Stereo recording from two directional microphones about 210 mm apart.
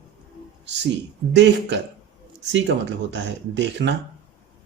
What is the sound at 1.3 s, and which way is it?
A man's voice, 55° right (ahead or behind).